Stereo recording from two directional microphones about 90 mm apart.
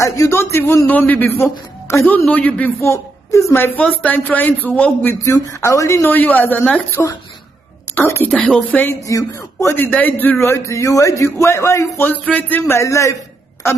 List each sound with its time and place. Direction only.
0.0 s a man's voice: 35° left (ahead or behind); by 2.7 s 15° left (ahead or behind)
2.8 s speech: 35° left (ahead or behind)
3.5 s a man's voice: 20° left (ahead or behind)
5.6 s a man's voice: 35° left (ahead or behind)
6.0 s a man's voice: 20° left (ahead or behind)
8.3 s speech: 5° left (ahead or behind)
9.0 s a man's voice: 40° left (ahead or behind)
9.8 s a man's voice: 15° left (ahead or behind)
10.4 s a man's voice: 30° left (ahead or behind)
12.0 s a man's voice: 20° left (ahead or behind)
12.7 s a man's voice: 35° left (ahead or behind)